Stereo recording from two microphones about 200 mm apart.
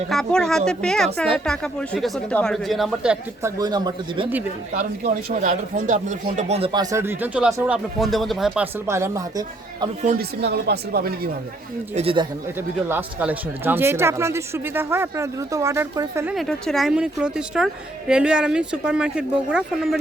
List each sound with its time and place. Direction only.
0.1 s speech: 5° left (ahead or behind)
3.6 s speech: 20° right (ahead or behind)
4.7 s speech: 40° right (ahead or behind); by 9.9 s 20° right (ahead or behind)
10.0 s speech: 40° right (ahead or behind)
10.4 s speech: 55° right (ahead or behind)
11.9 s speech: 25° right (ahead or behind)
12.5 s speech: 10° right (ahead or behind)
16.3 s speech: centre (ahead or behind)